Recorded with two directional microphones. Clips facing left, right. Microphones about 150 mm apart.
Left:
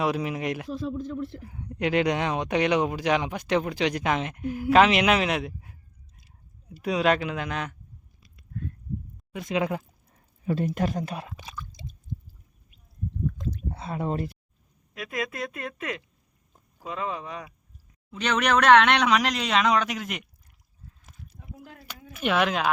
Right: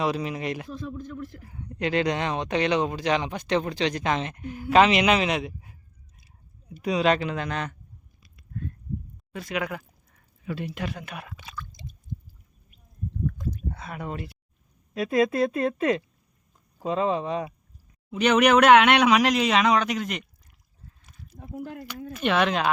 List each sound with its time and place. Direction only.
0.0 s speech: 5° left (ahead or behind)
0.9 s speech: 20° left (ahead or behind)
1.5 s speech: 10° left (ahead or behind)
6.8 s speech: 5° left (ahead or behind)
9.3 s a sound: 20° left (ahead or behind)
10.5 s speech: 40° left (ahead or behind); by 11.6 s 20° left (ahead or behind)
13.7 s speech: 30° left (ahead or behind)
14.9 s a woman's voice: 30° right (ahead or behind)
18.1 s speech: 10° right (ahead or behind)
21.3 s speech: 70° right (ahead or behind)
22.2 s speech: 5° left (ahead or behind)